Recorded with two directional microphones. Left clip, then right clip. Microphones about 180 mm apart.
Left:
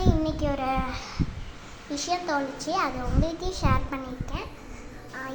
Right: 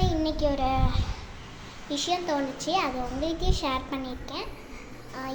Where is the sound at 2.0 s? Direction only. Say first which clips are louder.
Left 1 dB; 10° right (ahead or behind).